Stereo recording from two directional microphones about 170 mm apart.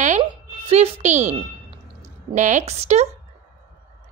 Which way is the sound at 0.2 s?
35° right (ahead or behind).